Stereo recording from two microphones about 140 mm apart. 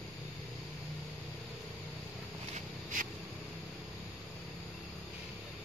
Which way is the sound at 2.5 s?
75° right (ahead or behind).